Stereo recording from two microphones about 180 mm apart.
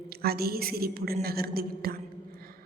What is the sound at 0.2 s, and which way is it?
A woman's voice, 60° right (ahead or behind).